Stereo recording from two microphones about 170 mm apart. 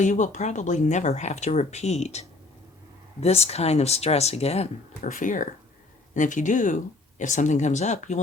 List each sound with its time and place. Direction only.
0.0 s speech: 45° left (ahead or behind)
5.1 s speech: 50° left (ahead or behind)